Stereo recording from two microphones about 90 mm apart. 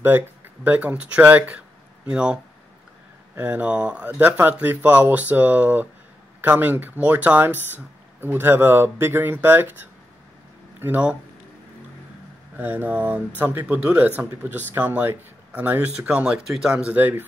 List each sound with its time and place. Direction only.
0.7 s speech: 15° right (ahead or behind)
12.5 s speech: 20° right (ahead or behind)